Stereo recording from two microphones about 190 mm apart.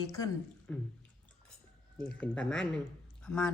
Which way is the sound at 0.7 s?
5° left (ahead or behind).